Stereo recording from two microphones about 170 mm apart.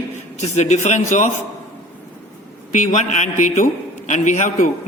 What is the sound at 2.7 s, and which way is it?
Speech, 45° left (ahead or behind).